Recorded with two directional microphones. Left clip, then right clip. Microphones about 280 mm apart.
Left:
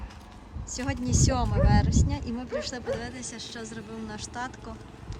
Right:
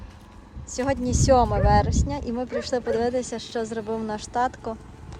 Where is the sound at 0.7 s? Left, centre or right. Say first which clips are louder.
Right 7 dB; centre.